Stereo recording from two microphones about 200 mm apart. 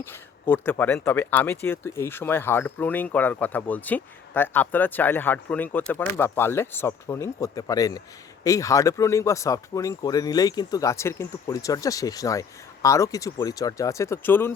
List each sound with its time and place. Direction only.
0.0 s speech: 10° left (ahead or behind)